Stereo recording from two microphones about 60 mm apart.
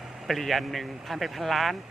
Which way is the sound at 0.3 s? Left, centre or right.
Centre.